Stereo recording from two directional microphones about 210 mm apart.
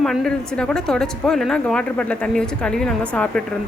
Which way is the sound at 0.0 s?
5° left (ahead or behind).